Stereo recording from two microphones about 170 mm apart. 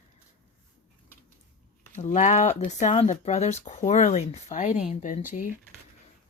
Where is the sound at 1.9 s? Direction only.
45° left (ahead or behind).